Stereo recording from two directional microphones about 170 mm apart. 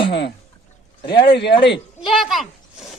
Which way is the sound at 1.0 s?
30° left (ahead or behind).